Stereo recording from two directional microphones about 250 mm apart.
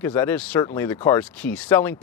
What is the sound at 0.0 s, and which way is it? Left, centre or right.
Speech, centre.